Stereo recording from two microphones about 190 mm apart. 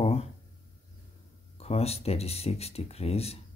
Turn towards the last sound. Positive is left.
turn(degrees=30)  # may be behind; listen again after turning